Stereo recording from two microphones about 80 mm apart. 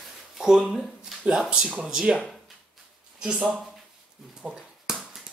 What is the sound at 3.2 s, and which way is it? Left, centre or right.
Speech, centre.